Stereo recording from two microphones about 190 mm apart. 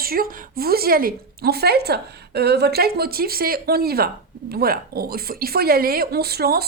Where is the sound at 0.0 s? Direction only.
50° right (ahead or behind).